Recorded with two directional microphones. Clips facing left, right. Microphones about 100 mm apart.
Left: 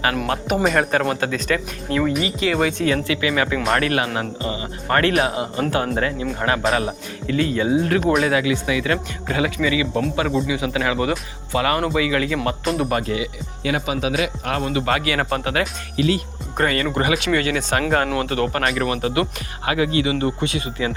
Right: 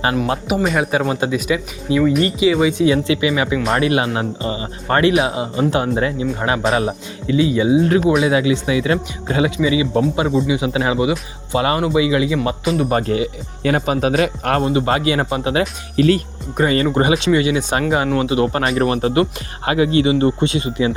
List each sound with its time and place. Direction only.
0.4 s speech: 5° right (ahead or behind)
2.0 s speech: centre (ahead or behind); by 7.3 s 30° right (ahead or behind)
7.3 s speech: 15° right (ahead or behind)
12.6 s speech: centre (ahead or behind)
12.9 s speech: 35° right (ahead or behind)
14.6 s speech: 25° right (ahead or behind)
16.0 s speech: 45° right (ahead or behind)
16.6 s speech: 25° right (ahead or behind)
17.8 s speech: 5° right (ahead or behind)
18.7 s speech: 35° right (ahead or behind)